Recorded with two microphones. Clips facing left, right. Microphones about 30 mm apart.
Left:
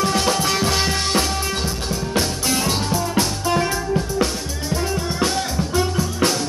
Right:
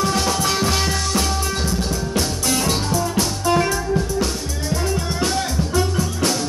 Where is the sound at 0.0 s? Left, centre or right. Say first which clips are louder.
Left 1 dB; centre.